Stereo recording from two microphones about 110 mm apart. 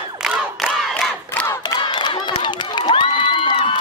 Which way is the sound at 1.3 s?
20° left (ahead or behind).